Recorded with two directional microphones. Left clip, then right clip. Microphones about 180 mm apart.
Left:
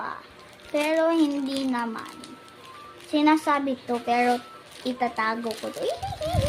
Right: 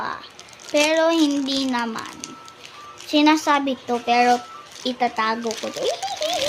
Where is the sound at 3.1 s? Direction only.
20° right (ahead or behind).